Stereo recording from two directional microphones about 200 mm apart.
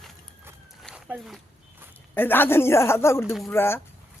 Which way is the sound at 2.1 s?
10° left (ahead or behind).